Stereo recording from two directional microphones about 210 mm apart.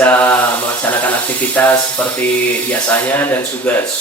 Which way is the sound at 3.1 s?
10° left (ahead or behind).